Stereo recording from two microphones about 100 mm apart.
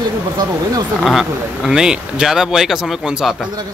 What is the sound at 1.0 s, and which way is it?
A man's voice, 5° right (ahead or behind).